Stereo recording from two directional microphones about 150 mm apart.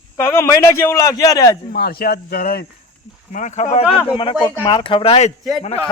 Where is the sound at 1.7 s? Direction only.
90° left.